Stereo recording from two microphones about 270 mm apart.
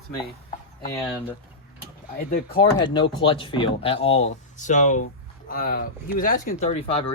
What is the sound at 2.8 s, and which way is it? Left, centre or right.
Speech, centre.